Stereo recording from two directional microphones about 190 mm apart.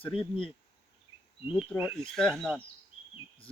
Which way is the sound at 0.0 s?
Centre (ahead or behind).